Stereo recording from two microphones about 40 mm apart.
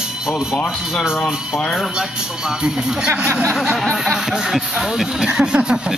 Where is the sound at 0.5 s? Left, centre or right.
Centre.